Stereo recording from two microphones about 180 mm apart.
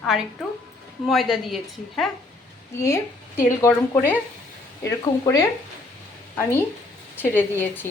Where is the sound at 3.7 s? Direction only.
10° left (ahead or behind).